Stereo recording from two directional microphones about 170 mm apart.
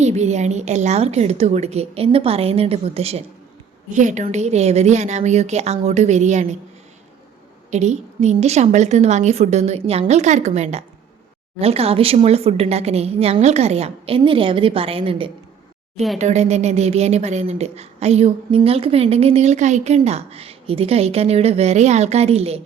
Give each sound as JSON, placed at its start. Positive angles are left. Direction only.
{"t": 0.0, "sound": "a woman's voice", "side_deg": -40}
{"t": 7.7, "sound": "a woman's voice", "side_deg": -40}